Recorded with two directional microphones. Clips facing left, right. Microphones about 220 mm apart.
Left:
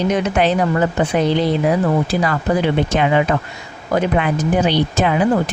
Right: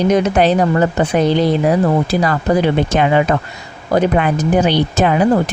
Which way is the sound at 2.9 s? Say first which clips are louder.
Right 2 dB; 45° right (ahead or behind).